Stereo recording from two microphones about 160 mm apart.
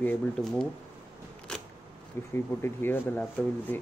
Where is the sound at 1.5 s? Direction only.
5° left (ahead or behind).